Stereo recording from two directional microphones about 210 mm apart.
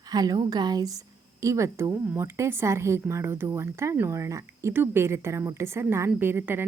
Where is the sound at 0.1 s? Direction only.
20° right (ahead or behind).